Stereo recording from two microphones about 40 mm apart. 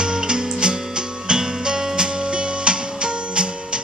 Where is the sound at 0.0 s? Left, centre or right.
Centre.